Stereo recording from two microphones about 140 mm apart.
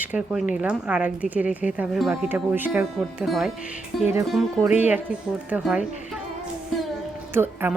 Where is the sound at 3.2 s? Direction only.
Centre (ahead or behind).